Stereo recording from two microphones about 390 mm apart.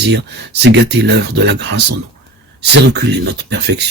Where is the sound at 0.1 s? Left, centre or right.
Right.